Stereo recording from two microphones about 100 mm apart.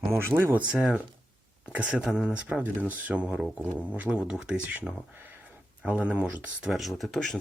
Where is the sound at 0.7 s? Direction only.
10° right (ahead or behind).